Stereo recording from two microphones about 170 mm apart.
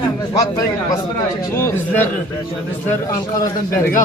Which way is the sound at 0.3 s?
25° left (ahead or behind).